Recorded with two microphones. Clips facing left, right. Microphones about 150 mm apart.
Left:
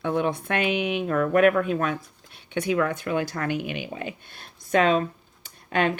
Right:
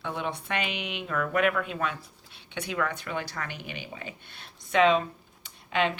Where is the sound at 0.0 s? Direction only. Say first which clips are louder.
Left 8 dB; 50° left (ahead or behind).